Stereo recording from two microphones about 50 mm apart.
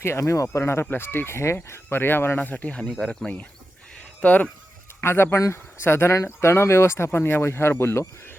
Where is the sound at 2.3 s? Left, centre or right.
Left.